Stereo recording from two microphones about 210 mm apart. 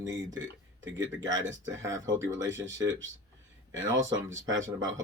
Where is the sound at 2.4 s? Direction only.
60° right (ahead or behind).